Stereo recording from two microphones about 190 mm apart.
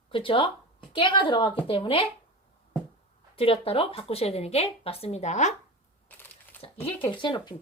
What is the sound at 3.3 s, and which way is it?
Speech, 30° left (ahead or behind).